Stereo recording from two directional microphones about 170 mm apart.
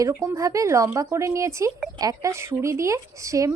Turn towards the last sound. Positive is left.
turn(degrees=-20)  # may be behind; listen again after turning